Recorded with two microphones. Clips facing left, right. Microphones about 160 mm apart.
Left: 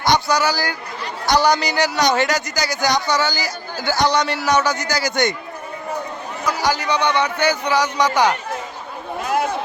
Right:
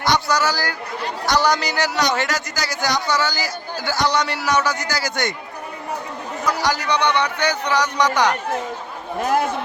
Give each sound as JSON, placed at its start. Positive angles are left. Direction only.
{"t": 0.0, "sound": "speech", "side_deg": 15}
{"t": 6.4, "sound": "a man's voice", "side_deg": 0}